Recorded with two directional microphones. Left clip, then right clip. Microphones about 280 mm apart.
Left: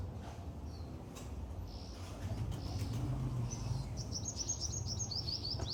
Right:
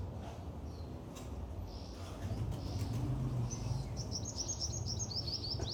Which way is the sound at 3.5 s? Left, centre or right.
Centre.